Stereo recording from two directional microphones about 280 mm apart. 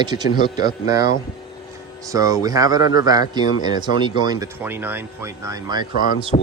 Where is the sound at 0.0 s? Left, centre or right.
Centre.